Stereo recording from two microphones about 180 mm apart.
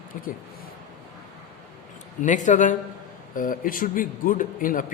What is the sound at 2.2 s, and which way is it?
A man's voice, 45° left (ahead or behind).